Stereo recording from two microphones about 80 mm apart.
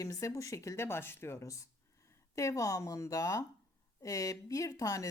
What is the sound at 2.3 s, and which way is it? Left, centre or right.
A woman's voice, left.